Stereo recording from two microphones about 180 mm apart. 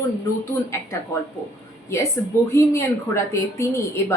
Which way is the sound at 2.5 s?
15° left (ahead or behind).